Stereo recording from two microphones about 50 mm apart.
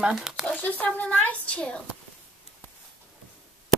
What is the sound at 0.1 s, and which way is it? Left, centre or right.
Speech, centre.